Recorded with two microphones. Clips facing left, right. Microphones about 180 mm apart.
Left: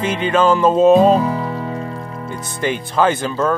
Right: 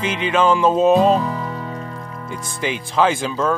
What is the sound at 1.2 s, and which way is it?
Music, 30° left (ahead or behind).